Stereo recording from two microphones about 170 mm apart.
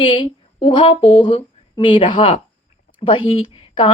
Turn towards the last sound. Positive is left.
turn(degrees=30)  # may be behind; listen again after turning